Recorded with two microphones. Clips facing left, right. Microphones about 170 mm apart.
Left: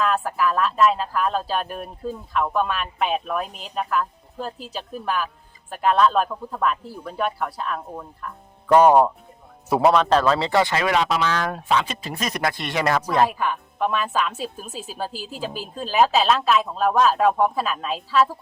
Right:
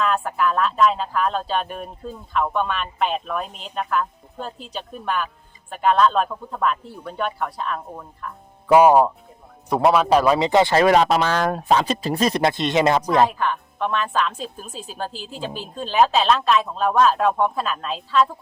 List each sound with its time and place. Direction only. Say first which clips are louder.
0.0 s a woman's voice: even; centre (ahead or behind)
9.9 s speech: right 2 dB; 10° right (ahead or behind)
10.7 s speech: right 6 dB; 40° right (ahead or behind); by 13.3 s 20° right (ahead or behind)
13.4 s a woman's voice: even; 5° left (ahead or behind)